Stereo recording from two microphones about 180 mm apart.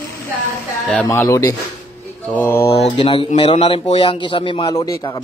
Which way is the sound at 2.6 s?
30° left (ahead or behind).